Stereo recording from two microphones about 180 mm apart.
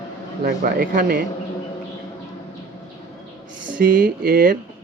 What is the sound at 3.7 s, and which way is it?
Speech, 50° right (ahead or behind).